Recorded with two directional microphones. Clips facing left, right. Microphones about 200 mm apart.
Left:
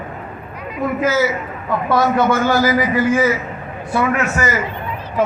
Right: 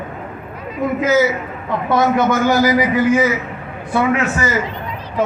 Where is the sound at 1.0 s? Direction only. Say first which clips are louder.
Right 3 dB; 20° right (ahead or behind).